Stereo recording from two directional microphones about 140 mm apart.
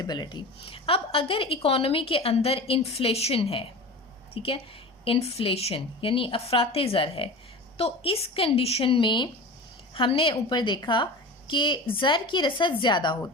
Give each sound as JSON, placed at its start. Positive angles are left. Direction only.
{"t": 0.0, "sound": "a woman's voice", "side_deg": 30}